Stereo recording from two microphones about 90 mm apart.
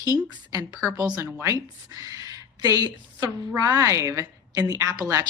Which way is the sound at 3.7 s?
40° right (ahead or behind).